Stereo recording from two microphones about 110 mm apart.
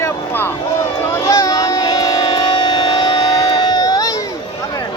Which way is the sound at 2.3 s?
50° left (ahead or behind).